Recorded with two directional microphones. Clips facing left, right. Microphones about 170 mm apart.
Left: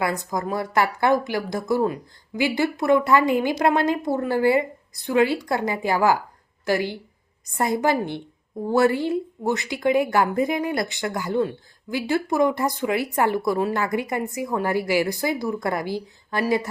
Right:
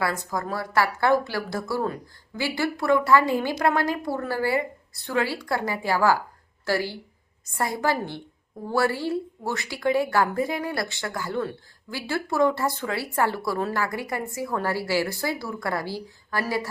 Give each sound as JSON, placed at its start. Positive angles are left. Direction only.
{"t": 0.0, "sound": "a woman's voice", "side_deg": 20}